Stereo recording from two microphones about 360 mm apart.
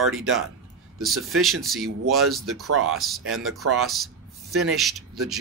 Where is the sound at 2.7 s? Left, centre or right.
Right.